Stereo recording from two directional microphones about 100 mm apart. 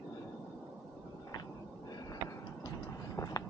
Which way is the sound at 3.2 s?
40° left (ahead or behind).